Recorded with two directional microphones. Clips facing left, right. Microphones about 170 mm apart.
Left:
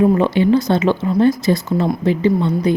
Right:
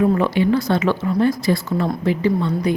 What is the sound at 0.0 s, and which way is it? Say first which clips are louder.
A woman's voice: left 3 dB; 20° left (ahead or behind).